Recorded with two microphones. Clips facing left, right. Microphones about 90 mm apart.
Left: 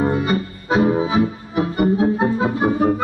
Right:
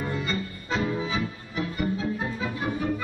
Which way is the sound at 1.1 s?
60° left (ahead or behind).